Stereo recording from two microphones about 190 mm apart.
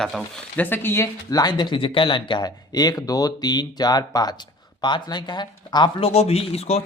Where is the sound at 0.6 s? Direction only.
10° left (ahead or behind).